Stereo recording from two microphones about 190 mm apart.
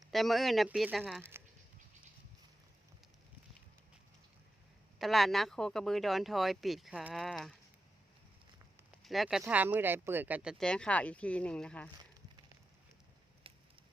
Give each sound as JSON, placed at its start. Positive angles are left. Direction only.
{"t": 0.0, "sound": "speech", "side_deg": 0}
{"t": 4.9, "sound": "speech", "side_deg": 0}
{"t": 9.0, "sound": "speech", "side_deg": 0}
{"t": 13.5, "sound": "a sound", "side_deg": -30}